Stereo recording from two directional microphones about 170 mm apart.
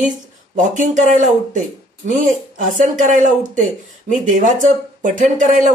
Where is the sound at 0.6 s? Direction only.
45° right (ahead or behind).